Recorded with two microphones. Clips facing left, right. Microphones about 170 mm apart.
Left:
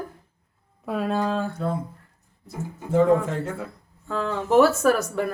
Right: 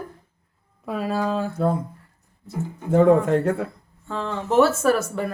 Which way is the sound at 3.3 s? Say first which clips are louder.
Right 9 dB; 65° right (ahead or behind).